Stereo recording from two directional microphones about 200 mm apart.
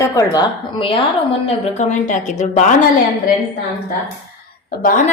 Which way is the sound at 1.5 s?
35° left (ahead or behind).